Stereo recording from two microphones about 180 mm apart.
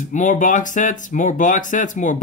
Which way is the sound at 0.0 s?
45° left (ahead or behind).